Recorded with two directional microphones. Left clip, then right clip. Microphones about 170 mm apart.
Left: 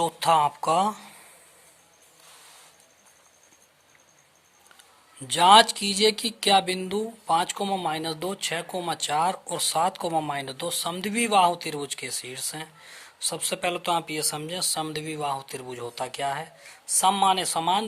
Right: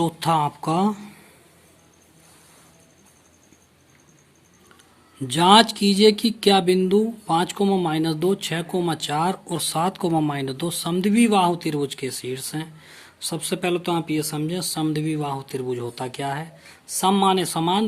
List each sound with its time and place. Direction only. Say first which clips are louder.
0.0 s speech: even; 25° left (ahead or behind)
5.2 s speech: right 1 dB; 20° left (ahead or behind)